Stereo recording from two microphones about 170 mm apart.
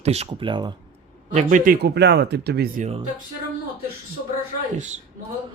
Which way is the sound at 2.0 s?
80° right.